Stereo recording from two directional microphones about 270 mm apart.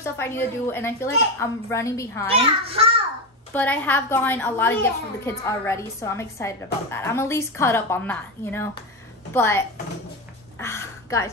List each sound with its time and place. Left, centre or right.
0.0 s speech: centre
2.2 s a child's voice: right
3.5 s speech: centre
10.6 s a sound: centre